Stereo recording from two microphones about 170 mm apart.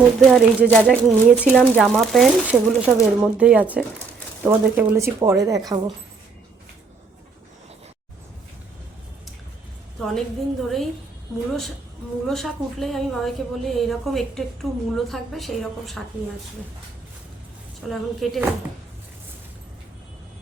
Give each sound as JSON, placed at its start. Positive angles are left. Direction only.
{"t": 0.2, "sound": "a woman's voice", "side_deg": 5}
{"t": 10.0, "sound": "a woman's voice", "side_deg": 0}
{"t": 12.3, "sound": "a woman's voice", "side_deg": 0}
{"t": 17.8, "sound": "a woman's voice", "side_deg": 0}